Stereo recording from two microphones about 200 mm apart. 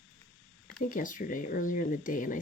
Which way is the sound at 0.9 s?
40° left (ahead or behind).